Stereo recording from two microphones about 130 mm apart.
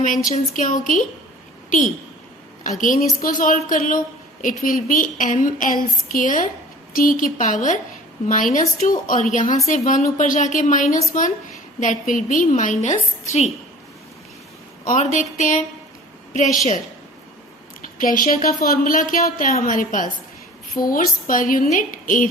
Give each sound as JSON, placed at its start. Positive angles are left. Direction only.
{"t": 0.0, "sound": "a woman's voice", "side_deg": 90}
{"t": 2.6, "sound": "a woman's voice", "side_deg": 90}
{"t": 9.6, "sound": "a woman's voice", "side_deg": 70}
{"t": 14.8, "sound": "a woman's voice", "side_deg": 70}
{"t": 18.0, "sound": "a woman's voice", "side_deg": 90}